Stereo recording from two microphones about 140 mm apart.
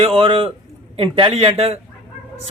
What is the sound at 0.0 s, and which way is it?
A man's voice, 40° right (ahead or behind).